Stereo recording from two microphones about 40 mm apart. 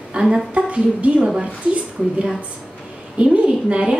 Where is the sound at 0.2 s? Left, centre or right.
Right.